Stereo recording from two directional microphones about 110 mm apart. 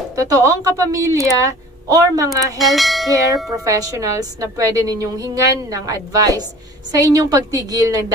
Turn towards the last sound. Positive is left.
turn(degrees=-35)  # may be behind; listen again after turning